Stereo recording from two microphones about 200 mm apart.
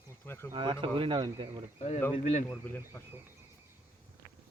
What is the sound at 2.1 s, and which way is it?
Speech, 35° left (ahead or behind).